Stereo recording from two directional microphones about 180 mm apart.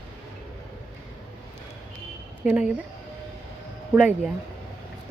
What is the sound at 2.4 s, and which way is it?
Speech, 5° right (ahead or behind).